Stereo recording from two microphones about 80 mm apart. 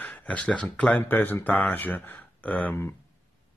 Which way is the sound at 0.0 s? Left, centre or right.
Centre.